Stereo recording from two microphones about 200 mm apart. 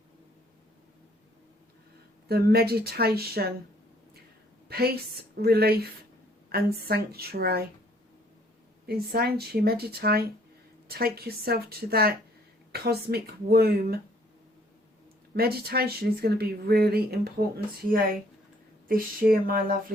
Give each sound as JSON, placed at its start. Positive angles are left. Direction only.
{"t": 2.2, "sound": "speech", "side_deg": -50}
{"t": 4.7, "sound": "a woman's voice", "side_deg": -50}
{"t": 8.9, "sound": "speech", "side_deg": -50}
{"t": 15.4, "sound": "speech", "side_deg": -50}